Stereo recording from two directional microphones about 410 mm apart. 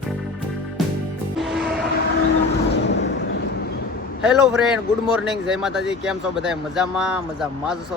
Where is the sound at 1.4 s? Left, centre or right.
Centre.